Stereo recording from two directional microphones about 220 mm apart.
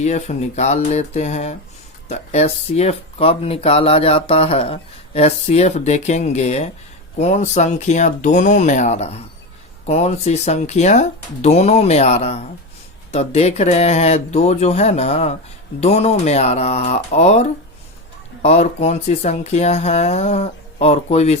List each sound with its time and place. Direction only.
0.0 s speech: 30° left (ahead or behind)
18.4 s speech: 30° left (ahead or behind)